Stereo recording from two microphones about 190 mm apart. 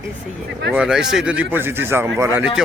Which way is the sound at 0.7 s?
5° right (ahead or behind).